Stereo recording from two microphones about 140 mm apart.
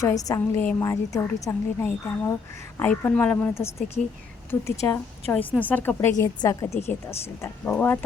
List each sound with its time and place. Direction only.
0.0 s a woman's voice: 25° left (ahead or behind)
6.1 s a woman's voice: 25° left (ahead or behind)